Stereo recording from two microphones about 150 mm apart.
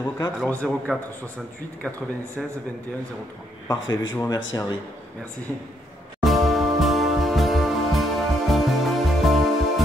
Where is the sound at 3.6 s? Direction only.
30° left (ahead or behind).